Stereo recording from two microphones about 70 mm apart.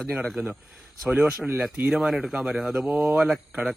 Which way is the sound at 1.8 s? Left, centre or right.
Centre.